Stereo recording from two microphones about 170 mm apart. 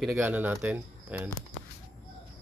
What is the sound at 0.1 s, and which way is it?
Speech, 10° right (ahead or behind).